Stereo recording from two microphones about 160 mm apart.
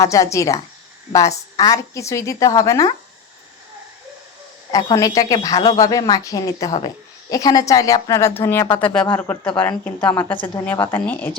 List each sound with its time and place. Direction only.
0.0 s a woman's voice: 20° left (ahead or behind)
4.7 s a woman's voice: 25° left (ahead or behind)
10.3 s speech: 30° left (ahead or behind)
10.9 s a woman's voice: 10° left (ahead or behind)